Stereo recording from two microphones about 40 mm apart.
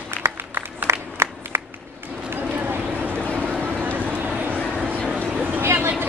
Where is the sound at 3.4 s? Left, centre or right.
Right.